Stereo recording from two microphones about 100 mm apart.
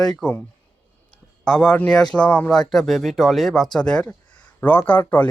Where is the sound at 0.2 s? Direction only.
10° left (ahead or behind).